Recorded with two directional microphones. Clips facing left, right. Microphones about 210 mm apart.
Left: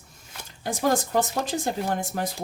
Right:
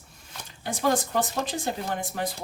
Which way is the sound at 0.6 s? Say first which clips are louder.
Left 1 dB; 45° left (ahead or behind).